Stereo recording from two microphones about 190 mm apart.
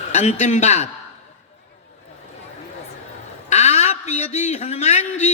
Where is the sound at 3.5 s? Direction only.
35° left (ahead or behind).